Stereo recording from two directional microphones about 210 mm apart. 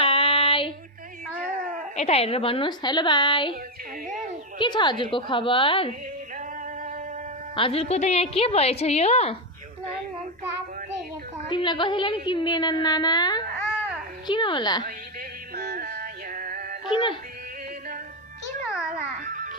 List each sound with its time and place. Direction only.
0.0 s female singing: 25° left (ahead or behind)
1.5 s cat: 40° right (ahead or behind)
2.0 s a woman's voice: 30° left (ahead or behind)
4.5 s a woman's voice: 20° left (ahead or behind)
7.5 s a woman's voice: 25° left (ahead or behind)
11.4 s a woman's voice: 20° left (ahead or behind)
15.5 s music: 50° right (ahead or behind)
16.9 s a woman's voice: 25° left (ahead or behind)
19.2 s music: 40° right (ahead or behind)